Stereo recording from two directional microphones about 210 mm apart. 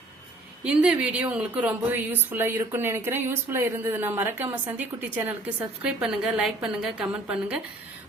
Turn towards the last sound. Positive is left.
turn(degrees=-5)  # may be behind; listen again after turning